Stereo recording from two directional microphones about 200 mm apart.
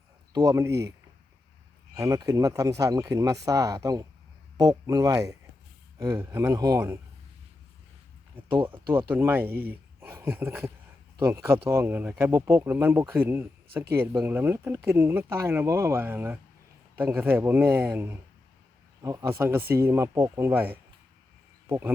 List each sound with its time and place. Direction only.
0.3 s speech: 15° right (ahead or behind)
2.0 s speech: 15° right (ahead or behind)
8.9 s speech: 10° right (ahead or behind)